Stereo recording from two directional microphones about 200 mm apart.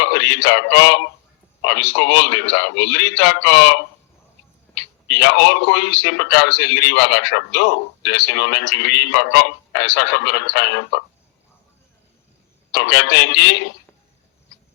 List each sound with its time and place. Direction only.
0.0 s a sound: 65° left (ahead or behind)
1.6 s a man's voice: 65° left (ahead or behind)
12.7 s a man's voice: 65° left (ahead or behind)